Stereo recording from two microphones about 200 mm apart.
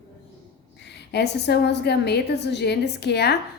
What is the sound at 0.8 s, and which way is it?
A woman's voice, 55° left (ahead or behind).